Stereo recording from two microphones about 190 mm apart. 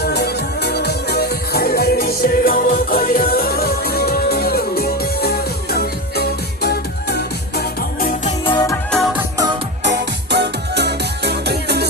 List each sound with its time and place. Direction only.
0.0 s music: 60° left (ahead or behind)
8.4 s music: 20° left (ahead or behind)
8.7 s music: 5° left (ahead or behind)
9.9 s music: 60° right (ahead or behind)